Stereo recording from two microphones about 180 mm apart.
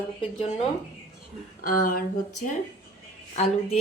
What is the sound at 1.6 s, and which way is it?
Speech, 50° left (ahead or behind).